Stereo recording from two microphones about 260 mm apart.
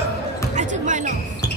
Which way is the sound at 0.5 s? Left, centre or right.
Right.